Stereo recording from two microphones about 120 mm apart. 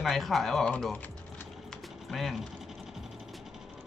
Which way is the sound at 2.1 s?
Centre (ahead or behind).